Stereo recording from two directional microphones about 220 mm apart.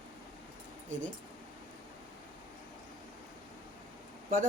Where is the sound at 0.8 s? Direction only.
35° right (ahead or behind).